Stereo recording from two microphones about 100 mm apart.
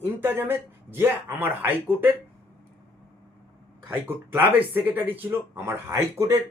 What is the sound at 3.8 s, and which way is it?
A man's voice, 20° right (ahead or behind).